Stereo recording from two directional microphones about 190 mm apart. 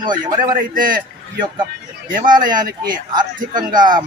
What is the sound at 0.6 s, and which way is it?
Speech, 45° right (ahead or behind).